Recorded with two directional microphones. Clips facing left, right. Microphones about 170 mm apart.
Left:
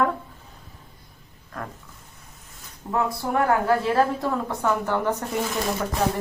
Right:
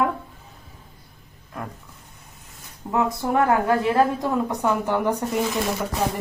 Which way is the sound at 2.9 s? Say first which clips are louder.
Right 2 dB; 20° right (ahead or behind).